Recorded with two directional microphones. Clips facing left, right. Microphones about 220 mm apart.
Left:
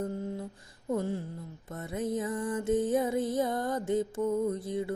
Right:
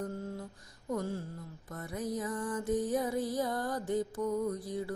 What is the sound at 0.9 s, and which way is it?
Music, 20° left (ahead or behind).